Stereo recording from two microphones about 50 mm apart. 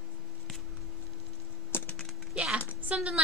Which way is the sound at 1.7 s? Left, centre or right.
Left.